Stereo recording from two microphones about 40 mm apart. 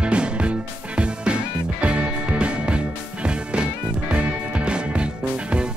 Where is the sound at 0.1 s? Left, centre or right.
Right.